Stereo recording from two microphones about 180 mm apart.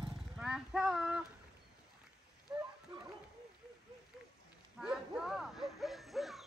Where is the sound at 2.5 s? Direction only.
10° right (ahead or behind).